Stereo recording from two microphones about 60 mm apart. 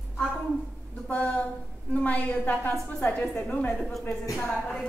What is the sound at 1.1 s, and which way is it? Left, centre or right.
A woman's voice, left.